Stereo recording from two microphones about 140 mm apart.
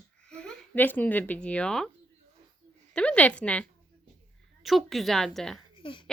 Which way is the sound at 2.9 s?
10° left (ahead or behind).